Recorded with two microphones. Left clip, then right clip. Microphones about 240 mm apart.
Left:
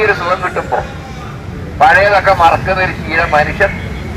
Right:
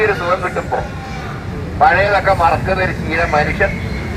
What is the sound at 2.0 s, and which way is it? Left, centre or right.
Speech, centre.